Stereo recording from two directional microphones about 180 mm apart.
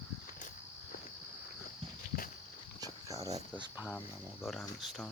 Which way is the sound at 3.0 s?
20° right (ahead or behind).